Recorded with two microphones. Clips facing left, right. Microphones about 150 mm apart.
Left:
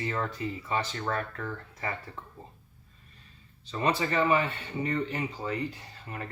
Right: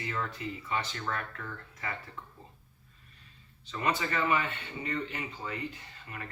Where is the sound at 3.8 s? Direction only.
30° left (ahead or behind).